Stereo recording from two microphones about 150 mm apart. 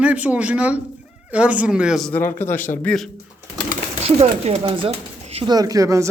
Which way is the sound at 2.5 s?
15° left (ahead or behind).